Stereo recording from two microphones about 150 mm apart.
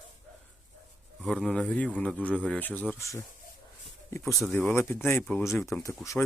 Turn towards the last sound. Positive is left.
turn(degrees=15)  # may be behind; listen again after turning